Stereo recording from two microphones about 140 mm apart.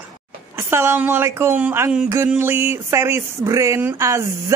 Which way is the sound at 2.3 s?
15° right (ahead or behind).